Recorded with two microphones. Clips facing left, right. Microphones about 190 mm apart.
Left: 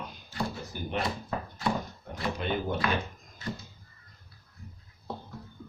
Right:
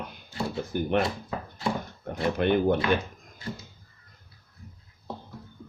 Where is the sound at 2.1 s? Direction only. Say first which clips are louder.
Right 7 dB; 60° right (ahead or behind).